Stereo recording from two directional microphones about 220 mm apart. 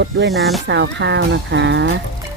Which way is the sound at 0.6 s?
55° right (ahead or behind).